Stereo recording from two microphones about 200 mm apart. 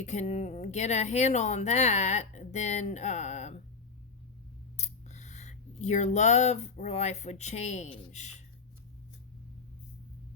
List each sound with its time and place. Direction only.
0.0 s speech: 35° left (ahead or behind)
4.8 s speech: 35° left (ahead or behind)